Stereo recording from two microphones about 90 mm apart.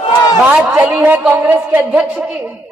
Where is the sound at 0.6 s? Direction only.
20° right (ahead or behind).